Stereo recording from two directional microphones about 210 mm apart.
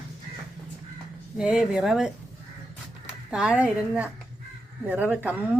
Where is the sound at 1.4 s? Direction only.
5° right (ahead or behind).